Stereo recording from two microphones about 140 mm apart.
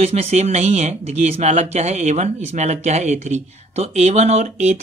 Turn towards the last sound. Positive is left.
turn(degrees=-55)  # may be behind; listen again after turning